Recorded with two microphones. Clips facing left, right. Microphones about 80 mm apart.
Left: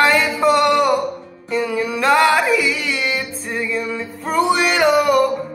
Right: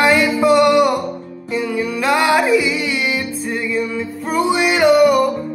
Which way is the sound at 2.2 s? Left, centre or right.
Centre.